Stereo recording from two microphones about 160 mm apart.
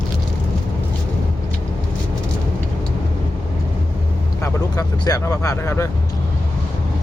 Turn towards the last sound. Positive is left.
turn(degrees=20)  # may be behind; listen again after turning